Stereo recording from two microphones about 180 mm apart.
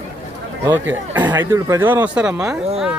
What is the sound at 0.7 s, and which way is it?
Speech, 10° right (ahead or behind).